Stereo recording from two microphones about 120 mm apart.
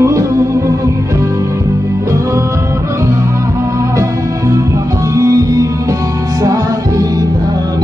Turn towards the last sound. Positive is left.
turn(degrees=-30)  # may be behind; listen again after turning